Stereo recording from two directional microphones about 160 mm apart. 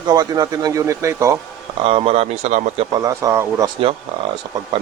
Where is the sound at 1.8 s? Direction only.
35° right (ahead or behind).